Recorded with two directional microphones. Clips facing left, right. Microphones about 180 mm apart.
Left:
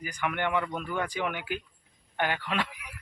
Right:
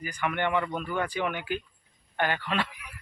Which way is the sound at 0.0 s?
10° left (ahead or behind).